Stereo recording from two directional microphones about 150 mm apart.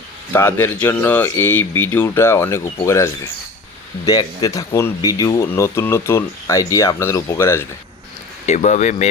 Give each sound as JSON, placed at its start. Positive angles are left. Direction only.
{"t": 0.3, "sound": "speech", "side_deg": 15}
{"t": 8.4, "sound": "speech", "side_deg": 50}